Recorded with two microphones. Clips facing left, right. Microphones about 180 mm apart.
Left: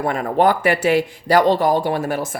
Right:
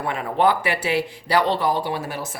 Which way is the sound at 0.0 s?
45° left (ahead or behind).